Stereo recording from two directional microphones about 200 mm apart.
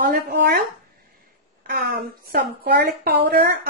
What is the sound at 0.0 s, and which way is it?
A woman's voice, 50° right (ahead or behind).